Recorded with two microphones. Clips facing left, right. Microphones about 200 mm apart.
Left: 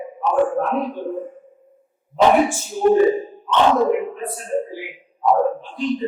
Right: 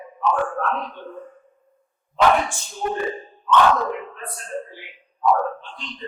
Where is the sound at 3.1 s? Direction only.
10° left (ahead or behind).